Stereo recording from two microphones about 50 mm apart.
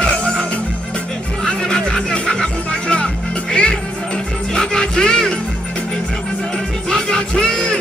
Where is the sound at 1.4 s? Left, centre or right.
Centre.